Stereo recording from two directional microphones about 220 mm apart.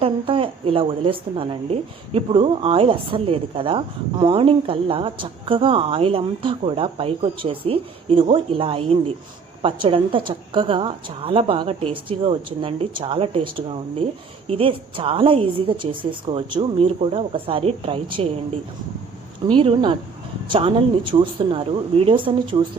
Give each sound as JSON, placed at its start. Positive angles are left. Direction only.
{"t": 0.0, "sound": "a woman's voice", "side_deg": -25}
{"t": 19.5, "sound": "a woman's voice", "side_deg": -25}